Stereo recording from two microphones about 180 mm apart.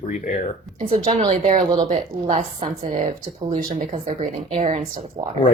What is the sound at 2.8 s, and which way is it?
A woman's voice, 45° right (ahead or behind).